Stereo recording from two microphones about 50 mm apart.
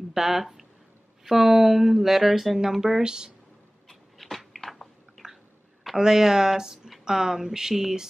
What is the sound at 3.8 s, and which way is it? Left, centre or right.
Chewing, centre.